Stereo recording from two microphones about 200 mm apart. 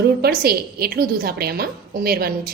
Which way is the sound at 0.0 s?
50° right (ahead or behind).